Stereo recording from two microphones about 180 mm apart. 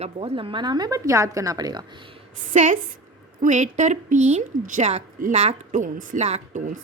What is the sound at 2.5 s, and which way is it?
A woman's voice, 45° right (ahead or behind).